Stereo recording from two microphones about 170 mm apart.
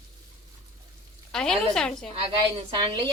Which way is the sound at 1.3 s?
5° left (ahead or behind).